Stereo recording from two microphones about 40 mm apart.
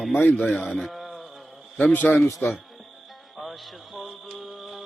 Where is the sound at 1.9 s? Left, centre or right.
Left.